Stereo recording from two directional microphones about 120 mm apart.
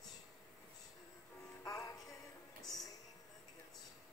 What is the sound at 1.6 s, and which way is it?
Music, 30° left (ahead or behind).